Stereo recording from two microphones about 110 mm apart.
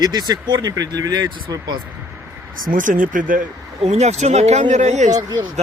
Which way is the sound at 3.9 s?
85° right.